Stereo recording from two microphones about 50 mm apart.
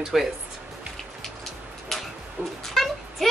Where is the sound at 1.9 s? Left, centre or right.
Centre.